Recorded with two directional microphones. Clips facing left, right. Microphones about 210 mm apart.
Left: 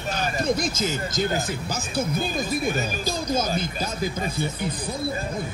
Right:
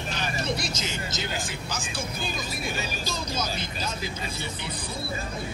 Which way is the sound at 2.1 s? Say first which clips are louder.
Left 8 dB; 55° left (ahead or behind).